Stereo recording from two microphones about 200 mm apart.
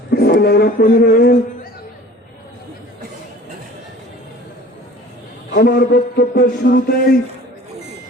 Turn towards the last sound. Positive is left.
turn(degrees=45)  # may be behind; listen again after turning